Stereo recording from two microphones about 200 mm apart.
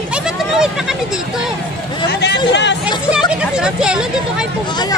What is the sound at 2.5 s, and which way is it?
Speech, 60° left (ahead or behind).